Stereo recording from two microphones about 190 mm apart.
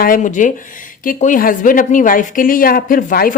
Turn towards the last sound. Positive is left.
turn(degrees=50)  # may be behind; listen again after turning